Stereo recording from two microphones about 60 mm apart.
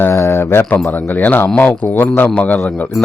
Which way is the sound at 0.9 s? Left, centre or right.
Left.